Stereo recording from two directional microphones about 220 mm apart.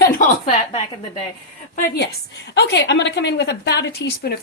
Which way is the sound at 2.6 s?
50° left (ahead or behind).